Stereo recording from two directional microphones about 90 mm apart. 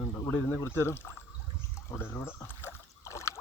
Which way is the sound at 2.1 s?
25° left (ahead or behind).